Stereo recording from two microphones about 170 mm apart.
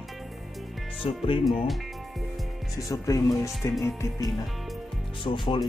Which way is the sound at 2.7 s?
20° left (ahead or behind).